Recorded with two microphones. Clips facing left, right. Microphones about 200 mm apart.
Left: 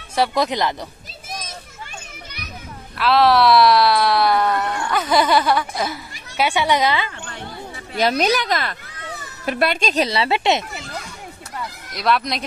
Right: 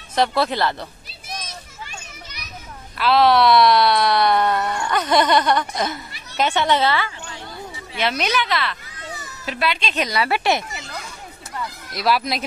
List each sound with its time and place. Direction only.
0.1 s speech: 10° left (ahead or behind)
3.0 s speech: centre (ahead or behind); by 7.1 s 15° left (ahead or behind)
7.2 s a sound: 55° left (ahead or behind)
8.0 s a child's voice: 35° left (ahead or behind)
10.0 s speech: 25° left (ahead or behind)
11.9 s speech: 5° right (ahead or behind)